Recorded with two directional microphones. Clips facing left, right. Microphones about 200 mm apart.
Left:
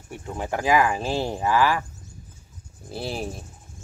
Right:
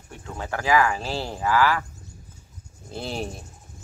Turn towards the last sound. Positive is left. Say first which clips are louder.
# left 1 dB
turn(degrees=0)  # may be behind; listen again after turning